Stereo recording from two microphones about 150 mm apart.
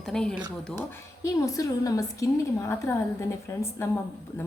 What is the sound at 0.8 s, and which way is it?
A woman's voice, 20° left (ahead or behind).